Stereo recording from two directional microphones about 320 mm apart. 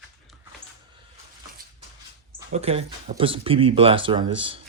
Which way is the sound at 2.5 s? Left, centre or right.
Centre.